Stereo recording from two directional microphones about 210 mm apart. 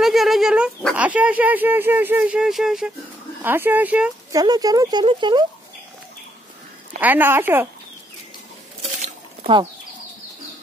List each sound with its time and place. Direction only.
0.0 s speech: centre (ahead or behind)
4.4 s speech: 20° right (ahead or behind)
7.0 s speech: 10° right (ahead or behind)
8.8 s patter: 30° right (ahead or behind)